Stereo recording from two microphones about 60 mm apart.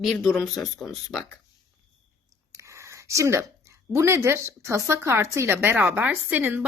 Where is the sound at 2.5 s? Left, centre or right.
Right.